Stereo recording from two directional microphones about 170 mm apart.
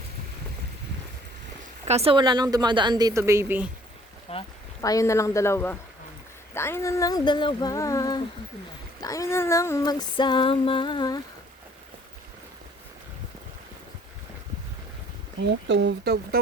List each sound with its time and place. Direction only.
1.9 s a woman's voice: 35° right (ahead or behind); by 3.7 s 15° right (ahead or behind)
4.3 s speech: 35° left (ahead or behind)
4.8 s speech: 20° left (ahead or behind)
6.5 s a sound: 15° left (ahead or behind)
15.4 s speech: 90° right; by 16.4 s 65° right (ahead or behind)